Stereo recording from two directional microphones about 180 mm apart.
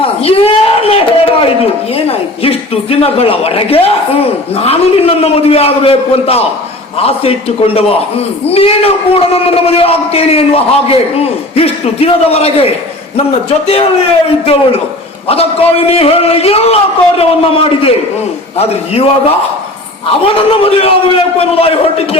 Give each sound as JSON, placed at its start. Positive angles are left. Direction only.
{"t": 0.2, "sound": "a sound", "side_deg": 35}
{"t": 2.0, "sound": "a man's voice", "side_deg": 30}
{"t": 15.3, "sound": "a man's voice", "side_deg": 35}
{"t": 20.3, "sound": "a man's voice", "side_deg": 30}